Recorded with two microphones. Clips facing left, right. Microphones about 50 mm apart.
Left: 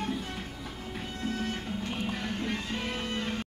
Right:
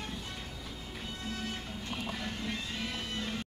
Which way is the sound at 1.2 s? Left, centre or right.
Left.